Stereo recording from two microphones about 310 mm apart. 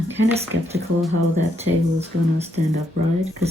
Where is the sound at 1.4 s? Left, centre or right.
Right.